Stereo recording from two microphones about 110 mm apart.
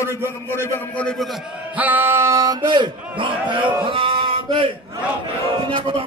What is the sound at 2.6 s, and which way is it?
A man's voice, 45° right (ahead or behind).